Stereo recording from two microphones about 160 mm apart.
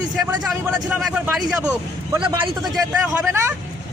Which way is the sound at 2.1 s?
30° right (ahead or behind).